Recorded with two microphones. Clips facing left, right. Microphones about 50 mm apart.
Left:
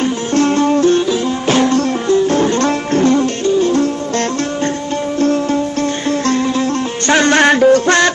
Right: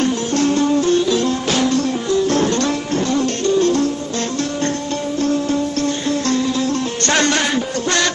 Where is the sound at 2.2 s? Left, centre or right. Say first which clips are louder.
Left 3 dB; left.